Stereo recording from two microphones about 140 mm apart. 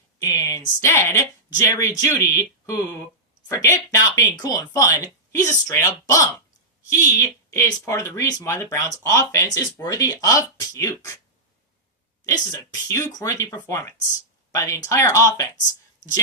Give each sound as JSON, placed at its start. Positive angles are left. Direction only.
{"t": 0.2, "sound": "a sound", "side_deg": 20}
{"t": 0.8, "sound": "speech", "side_deg": 20}
{"t": 12.2, "sound": "speech", "side_deg": 20}